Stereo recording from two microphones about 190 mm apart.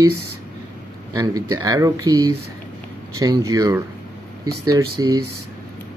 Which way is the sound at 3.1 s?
20° right (ahead or behind).